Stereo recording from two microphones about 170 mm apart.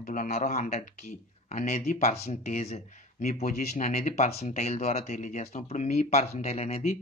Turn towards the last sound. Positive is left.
turn(degrees=40)  # may be behind; listen again after turning